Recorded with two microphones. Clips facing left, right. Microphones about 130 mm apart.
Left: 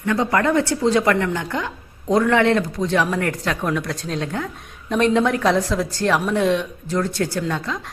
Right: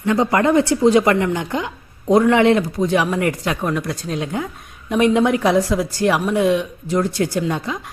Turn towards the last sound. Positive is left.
turn(degrees=-15)  # may be behind; listen again after turning